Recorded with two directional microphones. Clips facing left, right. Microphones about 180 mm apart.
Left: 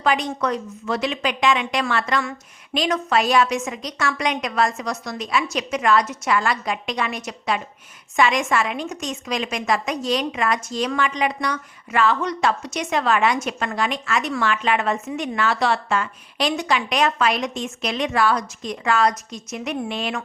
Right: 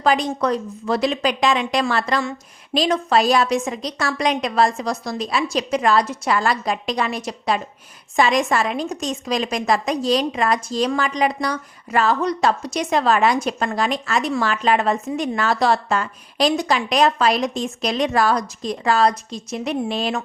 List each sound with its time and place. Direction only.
0.0 s a woman's voice: 35° right (ahead or behind)